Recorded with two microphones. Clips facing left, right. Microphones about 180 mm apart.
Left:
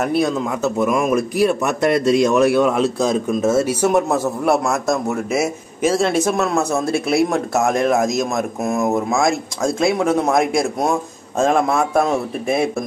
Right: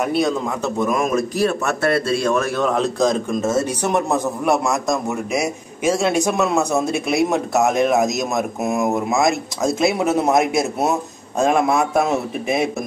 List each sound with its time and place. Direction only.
0.0 s speech: 5° left (ahead or behind)
5.8 s a man's voice: 10° right (ahead or behind)
9.7 s speech: 20° right (ahead or behind)
9.9 s a man's voice: 5° right (ahead or behind)